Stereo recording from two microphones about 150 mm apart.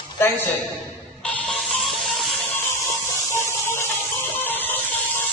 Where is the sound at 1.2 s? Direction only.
5° left (ahead or behind).